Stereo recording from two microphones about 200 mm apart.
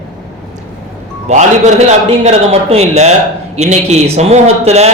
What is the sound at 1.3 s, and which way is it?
A man's voice, 35° right (ahead or behind).